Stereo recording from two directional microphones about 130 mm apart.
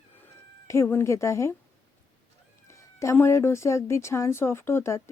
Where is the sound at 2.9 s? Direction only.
20° left (ahead or behind).